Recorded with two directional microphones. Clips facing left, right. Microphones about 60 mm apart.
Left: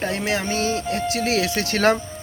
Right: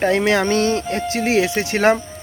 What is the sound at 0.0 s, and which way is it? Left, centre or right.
Speech, right.